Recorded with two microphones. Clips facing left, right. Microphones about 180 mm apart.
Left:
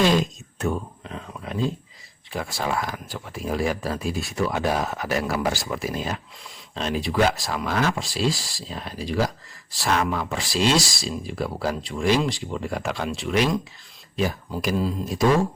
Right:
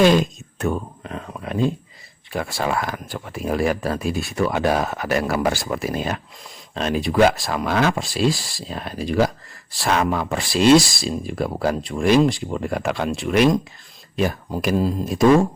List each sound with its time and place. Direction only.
0.0 s speech: 55° right (ahead or behind)